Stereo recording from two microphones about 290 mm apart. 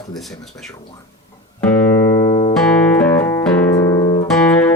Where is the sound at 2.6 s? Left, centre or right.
Centre.